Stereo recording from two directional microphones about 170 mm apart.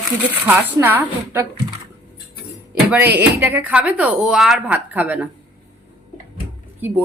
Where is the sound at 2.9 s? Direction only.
10° right (ahead or behind).